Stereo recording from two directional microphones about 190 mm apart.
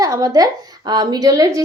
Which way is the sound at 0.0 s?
20° right (ahead or behind).